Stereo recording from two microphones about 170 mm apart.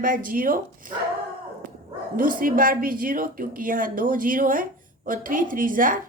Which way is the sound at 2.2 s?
55° right (ahead or behind).